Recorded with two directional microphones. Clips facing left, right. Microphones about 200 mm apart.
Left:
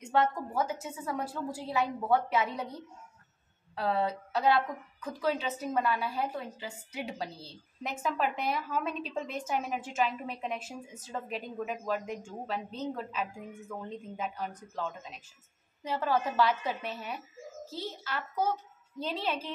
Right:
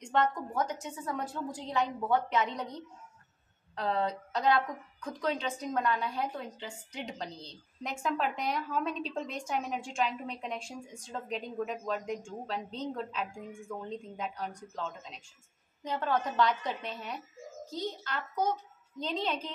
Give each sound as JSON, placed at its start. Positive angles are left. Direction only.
{"t": 0.0, "sound": "a woman's voice", "side_deg": 5}
{"t": 15.8, "sound": "a woman's voice", "side_deg": 5}